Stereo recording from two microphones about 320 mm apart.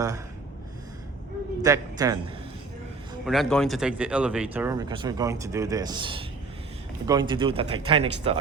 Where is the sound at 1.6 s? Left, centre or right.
Centre.